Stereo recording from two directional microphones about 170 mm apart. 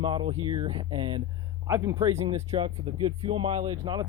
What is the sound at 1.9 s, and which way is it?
Speech, 35° right (ahead or behind).